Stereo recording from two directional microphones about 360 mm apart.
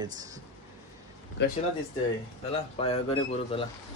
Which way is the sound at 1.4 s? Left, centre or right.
Left.